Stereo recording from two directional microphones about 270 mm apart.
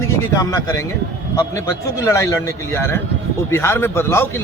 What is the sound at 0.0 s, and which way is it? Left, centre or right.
A man's voice, centre.